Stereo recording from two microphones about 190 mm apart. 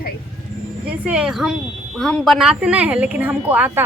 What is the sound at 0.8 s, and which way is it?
A woman's voice, 5° right (ahead or behind).